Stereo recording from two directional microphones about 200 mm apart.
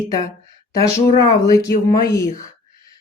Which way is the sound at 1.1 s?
15° left (ahead or behind).